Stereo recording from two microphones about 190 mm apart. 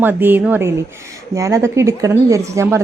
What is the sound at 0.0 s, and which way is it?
A woman's voice, 10° right (ahead or behind).